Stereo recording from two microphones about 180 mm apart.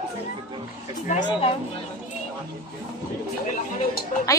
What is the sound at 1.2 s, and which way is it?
Speech, 30° left (ahead or behind).